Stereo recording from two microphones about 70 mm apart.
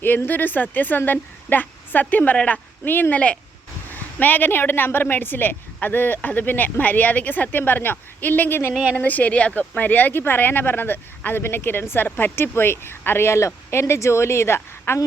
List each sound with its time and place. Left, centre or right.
0.3 s a woman's voice: left